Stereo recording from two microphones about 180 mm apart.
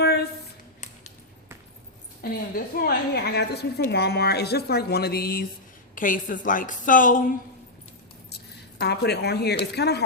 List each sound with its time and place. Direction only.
0.0 s a sound: 65° left (ahead or behind)
2.2 s a woman's voice: 55° left (ahead or behind)
8.8 s a woman's voice: 65° left (ahead or behind)